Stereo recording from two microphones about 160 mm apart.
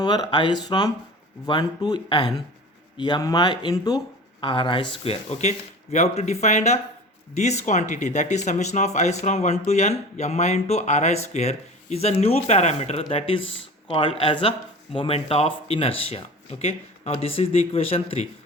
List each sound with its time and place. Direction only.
0.0 s speech: 25° left (ahead or behind)